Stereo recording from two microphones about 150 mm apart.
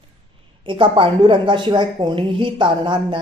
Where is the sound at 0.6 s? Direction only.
35° right (ahead or behind).